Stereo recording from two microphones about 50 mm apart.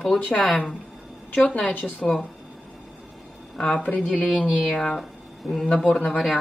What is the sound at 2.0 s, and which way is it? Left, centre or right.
Speech, centre.